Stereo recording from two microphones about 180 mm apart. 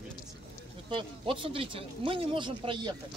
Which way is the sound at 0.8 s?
30° right (ahead or behind).